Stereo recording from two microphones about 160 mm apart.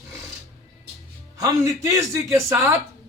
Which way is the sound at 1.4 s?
20° right (ahead or behind).